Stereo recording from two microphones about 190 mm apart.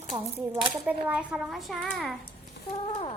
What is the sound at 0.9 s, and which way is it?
A child's voice, 5° right (ahead or behind).